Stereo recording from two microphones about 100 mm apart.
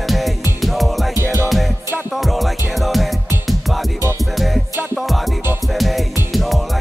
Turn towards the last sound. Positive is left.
turn(degrees=0)  # may be behind; listen again after turning